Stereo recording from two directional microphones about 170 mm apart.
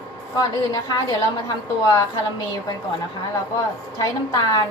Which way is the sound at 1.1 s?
20° left (ahead or behind).